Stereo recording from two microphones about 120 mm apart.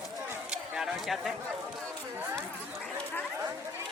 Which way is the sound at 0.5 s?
5° right (ahead or behind).